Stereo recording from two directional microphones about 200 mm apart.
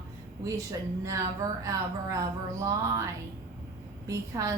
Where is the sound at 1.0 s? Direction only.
15° right (ahead or behind).